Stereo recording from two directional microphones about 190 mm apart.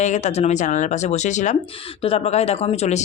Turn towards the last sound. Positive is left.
turn(degrees=35)  # may be behind; listen again after turning